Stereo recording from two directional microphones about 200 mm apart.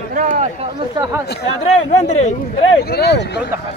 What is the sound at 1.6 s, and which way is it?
Speech, 35° left (ahead or behind).